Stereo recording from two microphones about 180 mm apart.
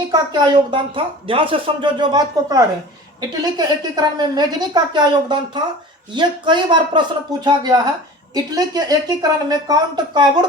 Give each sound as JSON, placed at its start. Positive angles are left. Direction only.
{"t": 0.1, "sound": "speech", "side_deg": -25}